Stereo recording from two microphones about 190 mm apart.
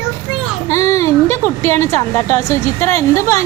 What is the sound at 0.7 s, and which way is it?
A woman's voice, 15° left (ahead or behind).